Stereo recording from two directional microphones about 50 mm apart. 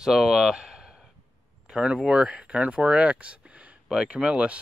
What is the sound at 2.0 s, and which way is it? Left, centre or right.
Speech, centre.